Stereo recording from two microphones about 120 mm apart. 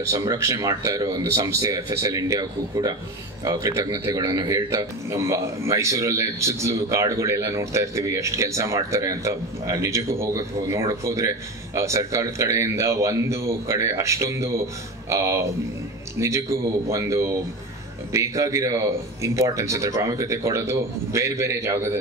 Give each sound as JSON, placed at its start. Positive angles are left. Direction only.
{"t": 0.1, "sound": "a man's voice", "side_deg": -25}